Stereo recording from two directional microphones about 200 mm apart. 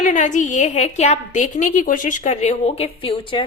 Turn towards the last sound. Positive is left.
turn(degrees=25)  # may be behind; listen again after turning